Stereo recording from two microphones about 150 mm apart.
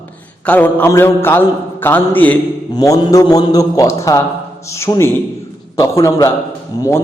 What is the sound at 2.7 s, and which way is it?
A man's voice, 25° left (ahead or behind).